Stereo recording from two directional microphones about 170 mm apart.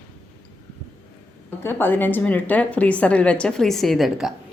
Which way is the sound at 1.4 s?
10° left (ahead or behind).